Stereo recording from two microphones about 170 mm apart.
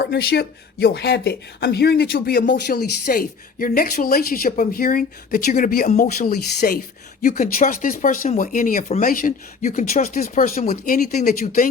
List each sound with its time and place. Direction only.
0.0 s speech: 65° left (ahead or behind)